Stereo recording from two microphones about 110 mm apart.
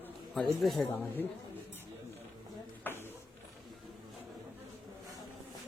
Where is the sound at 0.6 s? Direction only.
Centre (ahead or behind).